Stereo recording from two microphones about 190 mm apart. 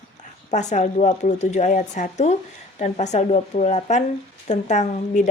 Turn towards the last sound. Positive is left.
turn(degrees=40)  # may be behind; listen again after turning